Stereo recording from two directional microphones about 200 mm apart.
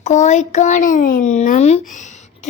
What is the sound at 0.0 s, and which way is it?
A child's voice, 35° left (ahead or behind).